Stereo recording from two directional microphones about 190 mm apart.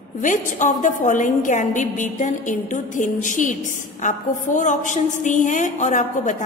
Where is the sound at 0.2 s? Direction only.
40° left (ahead or behind).